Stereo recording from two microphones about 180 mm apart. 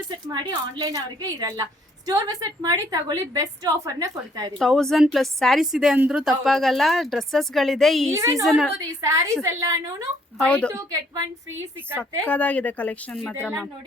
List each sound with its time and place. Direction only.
0.3 s a woman's voice: 25° right (ahead or behind)
4.5 s a woman's voice: centre (ahead or behind)
8.1 s a woman's voice: 15° right (ahead or behind)
8.4 s a woman's voice: 5° right (ahead or behind)
9.0 s a woman's voice: 20° right (ahead or behind)
10.3 s a woman's voice: 5° left (ahead or behind)
10.7 s a woman's voice: 20° right (ahead or behind)
12.2 s a woman's voice: 5° left (ahead or behind)